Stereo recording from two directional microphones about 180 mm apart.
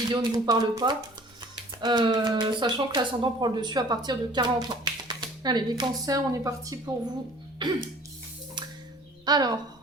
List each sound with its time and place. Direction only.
0.1 s speech: 25° right (ahead or behind)
7.6 s music: 25° right (ahead or behind)
9.2 s speech: 20° right (ahead or behind)